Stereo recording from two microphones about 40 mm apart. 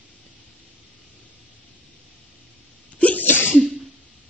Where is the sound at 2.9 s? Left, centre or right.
Left.